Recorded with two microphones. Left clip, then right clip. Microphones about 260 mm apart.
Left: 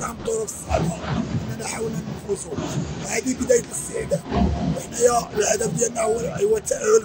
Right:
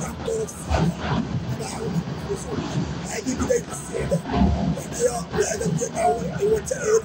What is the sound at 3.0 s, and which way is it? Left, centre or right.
Speech, left.